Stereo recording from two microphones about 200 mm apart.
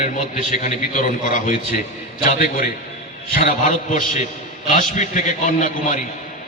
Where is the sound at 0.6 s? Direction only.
40° left (ahead or behind).